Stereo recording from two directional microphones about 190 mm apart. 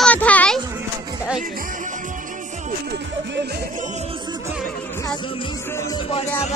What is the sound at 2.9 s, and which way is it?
Music, 65° right (ahead or behind).